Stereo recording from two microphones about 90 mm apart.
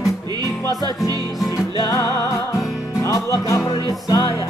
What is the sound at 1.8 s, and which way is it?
Music, 35° left (ahead or behind).